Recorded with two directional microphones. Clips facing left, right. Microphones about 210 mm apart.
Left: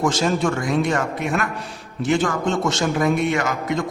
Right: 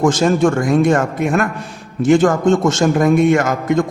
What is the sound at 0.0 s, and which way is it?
A man's voice, 50° right (ahead or behind).